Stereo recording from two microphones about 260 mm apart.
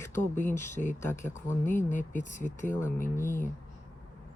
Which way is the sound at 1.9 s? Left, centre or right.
Left.